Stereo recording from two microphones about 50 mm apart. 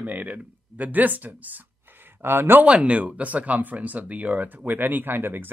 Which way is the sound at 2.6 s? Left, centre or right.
Right.